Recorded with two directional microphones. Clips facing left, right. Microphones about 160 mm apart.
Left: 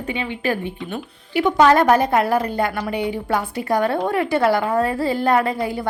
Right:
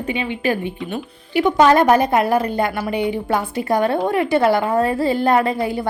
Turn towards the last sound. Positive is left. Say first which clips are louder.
# right 2 dB
turn(degrees=-25)  # may be behind; listen again after turning